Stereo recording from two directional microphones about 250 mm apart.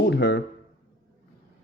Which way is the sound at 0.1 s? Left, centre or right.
Left.